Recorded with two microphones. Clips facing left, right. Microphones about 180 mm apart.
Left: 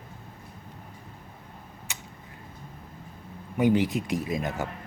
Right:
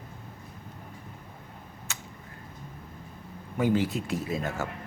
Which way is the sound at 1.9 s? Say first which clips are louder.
Right 1 dB; 15° left (ahead or behind).